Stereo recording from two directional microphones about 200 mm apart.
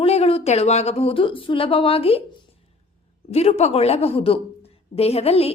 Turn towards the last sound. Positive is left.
turn(degrees=30)  # may be behind; listen again after turning